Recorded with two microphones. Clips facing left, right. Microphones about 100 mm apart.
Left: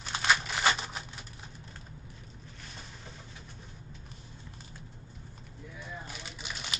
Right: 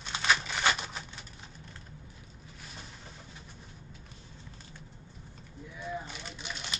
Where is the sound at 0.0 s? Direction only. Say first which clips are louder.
Left 1 dB; 5° left (ahead or behind).